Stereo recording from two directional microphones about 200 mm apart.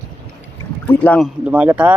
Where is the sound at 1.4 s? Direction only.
5° right (ahead or behind).